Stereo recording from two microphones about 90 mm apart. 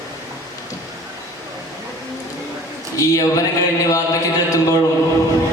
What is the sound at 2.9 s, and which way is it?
Music, 40° left (ahead or behind).